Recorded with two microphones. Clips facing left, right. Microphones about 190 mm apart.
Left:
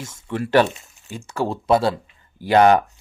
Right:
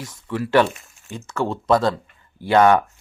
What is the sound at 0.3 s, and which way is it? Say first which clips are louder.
Speech: even; 45° left (ahead or behind).